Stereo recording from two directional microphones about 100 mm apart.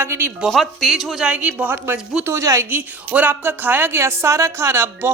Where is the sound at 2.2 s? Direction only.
30° right (ahead or behind).